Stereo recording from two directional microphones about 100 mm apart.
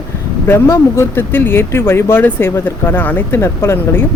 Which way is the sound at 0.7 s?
25° left (ahead or behind).